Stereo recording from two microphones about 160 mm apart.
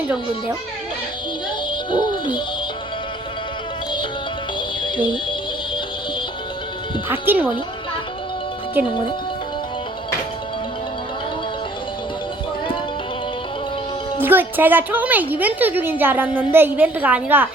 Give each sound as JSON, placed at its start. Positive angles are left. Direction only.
{"t": 1.7, "sound": "speech", "side_deg": 30}
{"t": 4.8, "sound": "music", "side_deg": 30}
{"t": 7.1, "sound": "a woman's voice", "side_deg": -10}
{"t": 14.2, "sound": "a woman's voice", "side_deg": -10}